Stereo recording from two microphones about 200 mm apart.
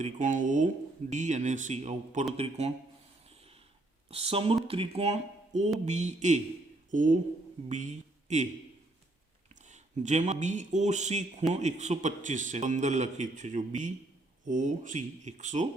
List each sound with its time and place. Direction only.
0.0 s a man's voice: 40° right (ahead or behind)
3.2 s a sound: 30° right (ahead or behind)
4.1 s a man's voice: 30° right (ahead or behind)
9.6 s a man's voice: 35° right (ahead or behind)